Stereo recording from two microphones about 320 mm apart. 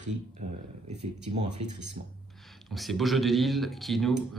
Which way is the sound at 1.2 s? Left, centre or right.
Right.